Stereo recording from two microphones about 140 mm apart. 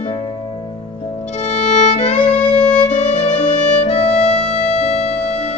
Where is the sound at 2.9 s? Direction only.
55° left (ahead or behind).